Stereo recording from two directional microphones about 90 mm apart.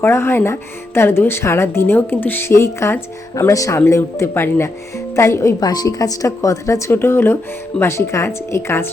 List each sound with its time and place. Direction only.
0.0 s a woman's voice: 30° left (ahead or behind)
5.5 s speech: 50° left (ahead or behind); by 8.9 s 30° left (ahead or behind)